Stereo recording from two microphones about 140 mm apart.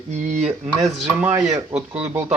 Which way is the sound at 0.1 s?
60° right (ahead or behind).